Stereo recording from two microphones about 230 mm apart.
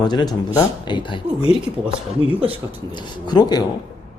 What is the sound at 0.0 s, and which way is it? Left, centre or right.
Speech, centre.